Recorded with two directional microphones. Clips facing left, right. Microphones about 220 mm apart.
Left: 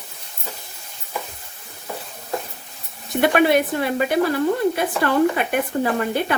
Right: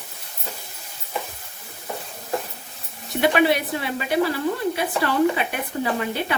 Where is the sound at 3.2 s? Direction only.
50° left (ahead or behind).